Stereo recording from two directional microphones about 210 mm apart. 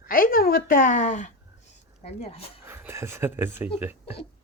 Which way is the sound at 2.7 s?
10° right (ahead or behind).